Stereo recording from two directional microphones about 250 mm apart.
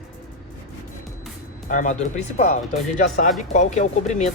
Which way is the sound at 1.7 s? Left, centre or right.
Left.